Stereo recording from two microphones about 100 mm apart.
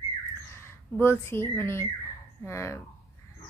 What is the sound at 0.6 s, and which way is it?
A woman's voice, 25° left (ahead or behind).